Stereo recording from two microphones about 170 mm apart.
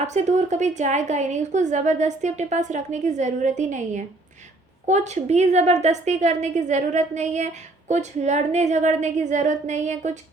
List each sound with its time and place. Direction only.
0.0 s a woman's voice: 40° right (ahead or behind)